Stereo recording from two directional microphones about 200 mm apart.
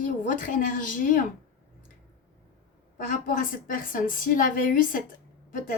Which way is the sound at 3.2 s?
40° left (ahead or behind).